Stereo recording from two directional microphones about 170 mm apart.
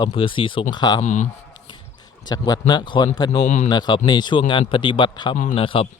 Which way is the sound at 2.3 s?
25° left (ahead or behind).